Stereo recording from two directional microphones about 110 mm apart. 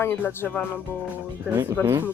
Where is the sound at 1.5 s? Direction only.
20° right (ahead or behind).